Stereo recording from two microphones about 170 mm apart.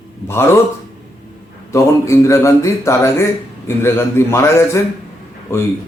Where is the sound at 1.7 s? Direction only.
15° left (ahead or behind).